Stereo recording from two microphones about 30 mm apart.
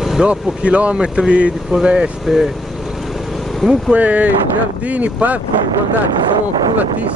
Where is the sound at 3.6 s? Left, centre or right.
Centre.